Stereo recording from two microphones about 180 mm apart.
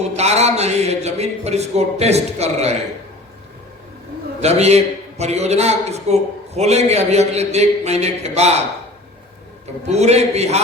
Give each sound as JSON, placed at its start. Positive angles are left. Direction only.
{"t": 0.0, "sound": "a man's voice", "side_deg": -35}
{"t": 4.4, "sound": "a man's voice", "side_deg": -35}
{"t": 9.9, "sound": "a man's voice", "side_deg": -35}